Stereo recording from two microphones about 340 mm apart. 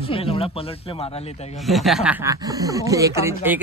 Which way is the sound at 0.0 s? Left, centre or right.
Centre.